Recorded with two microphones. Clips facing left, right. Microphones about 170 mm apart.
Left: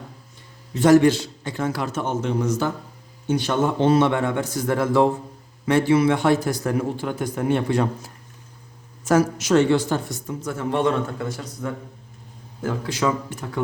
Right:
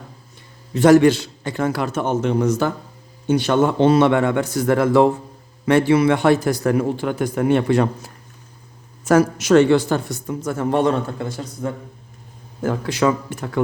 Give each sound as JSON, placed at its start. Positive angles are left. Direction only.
{"t": 0.7, "sound": "a man's voice", "side_deg": -70}
{"t": 9.0, "sound": "a man's voice", "side_deg": -60}
{"t": 10.4, "sound": "a man's voice", "side_deg": -45}
{"t": 12.6, "sound": "a man's voice", "side_deg": -60}